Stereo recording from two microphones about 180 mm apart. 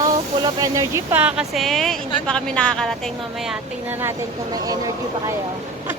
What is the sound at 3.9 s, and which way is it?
Speech, 15° right (ahead or behind).